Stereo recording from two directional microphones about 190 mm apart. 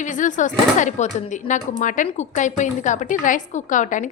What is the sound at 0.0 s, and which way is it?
A woman's voice, 40° left (ahead or behind).